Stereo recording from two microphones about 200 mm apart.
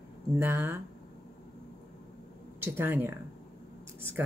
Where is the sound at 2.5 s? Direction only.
10° right (ahead or behind).